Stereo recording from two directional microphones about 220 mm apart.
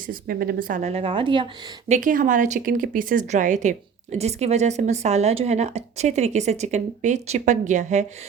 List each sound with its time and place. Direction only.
0.1 s speech: 40° right (ahead or behind); by 1.5 s 20° right (ahead or behind)
1.9 s speech: 40° right (ahead or behind)